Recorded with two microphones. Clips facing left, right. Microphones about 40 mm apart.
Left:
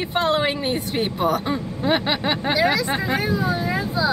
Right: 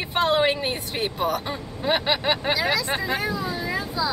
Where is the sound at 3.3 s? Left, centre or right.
Centre.